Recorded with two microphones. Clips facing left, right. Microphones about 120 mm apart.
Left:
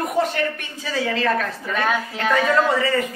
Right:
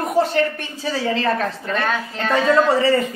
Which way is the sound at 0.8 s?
30° right (ahead or behind).